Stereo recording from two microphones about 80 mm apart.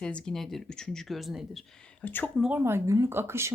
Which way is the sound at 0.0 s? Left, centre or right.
Centre.